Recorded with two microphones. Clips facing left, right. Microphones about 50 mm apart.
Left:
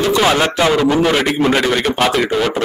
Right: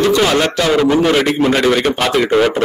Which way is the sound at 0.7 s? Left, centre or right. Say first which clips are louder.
Right 1 dB; centre.